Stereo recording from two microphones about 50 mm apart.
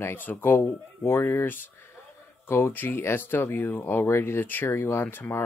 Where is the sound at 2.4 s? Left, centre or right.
Left.